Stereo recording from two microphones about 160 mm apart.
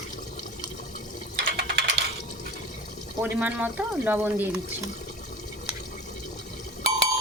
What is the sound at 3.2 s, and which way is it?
Speech, 15° right (ahead or behind).